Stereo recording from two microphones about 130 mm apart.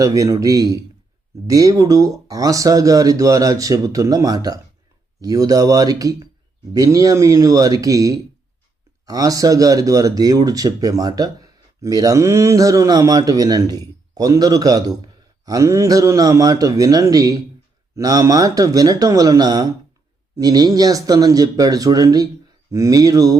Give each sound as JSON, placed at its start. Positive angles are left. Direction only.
{"t": 0.0, "sound": "speech", "side_deg": -25}